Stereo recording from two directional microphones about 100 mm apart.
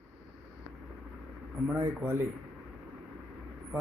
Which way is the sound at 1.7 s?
20° right (ahead or behind).